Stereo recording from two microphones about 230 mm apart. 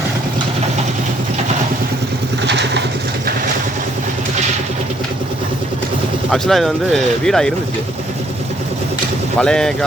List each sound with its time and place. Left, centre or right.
2.4 s vehicle: right
6.3 s speech: centre
9.4 s speech: centre